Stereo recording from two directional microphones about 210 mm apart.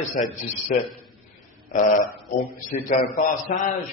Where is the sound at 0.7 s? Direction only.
35° left (ahead or behind).